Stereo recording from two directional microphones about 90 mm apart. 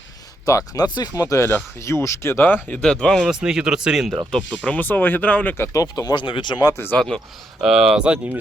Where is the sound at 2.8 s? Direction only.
5° left (ahead or behind).